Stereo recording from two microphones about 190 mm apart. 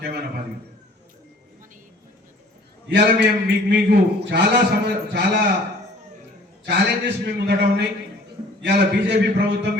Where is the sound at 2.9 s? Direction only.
70° right (ahead or behind).